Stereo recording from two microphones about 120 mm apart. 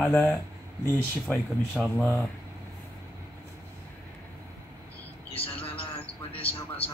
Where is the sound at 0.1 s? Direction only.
10° left (ahead or behind).